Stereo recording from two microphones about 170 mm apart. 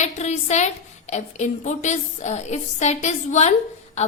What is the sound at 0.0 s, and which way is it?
A woman's voice, 40° left (ahead or behind).